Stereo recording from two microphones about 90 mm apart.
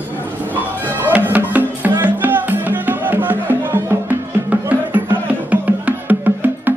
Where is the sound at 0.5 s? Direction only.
20° right (ahead or behind).